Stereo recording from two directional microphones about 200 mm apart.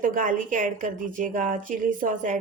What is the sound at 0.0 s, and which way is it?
A woman's voice, 40° right (ahead or behind).